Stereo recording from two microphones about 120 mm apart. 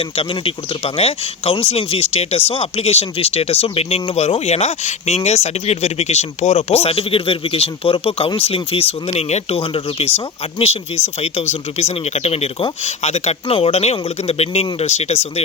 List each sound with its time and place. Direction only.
0.0 s speech: 50° left (ahead or behind)